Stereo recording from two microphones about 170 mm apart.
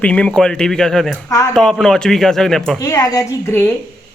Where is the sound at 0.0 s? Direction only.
5° left (ahead or behind).